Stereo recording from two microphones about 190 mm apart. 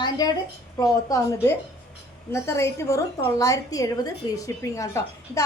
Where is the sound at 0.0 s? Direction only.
20° left (ahead or behind).